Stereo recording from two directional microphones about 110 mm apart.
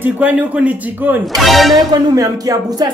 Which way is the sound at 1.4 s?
Centre (ahead or behind).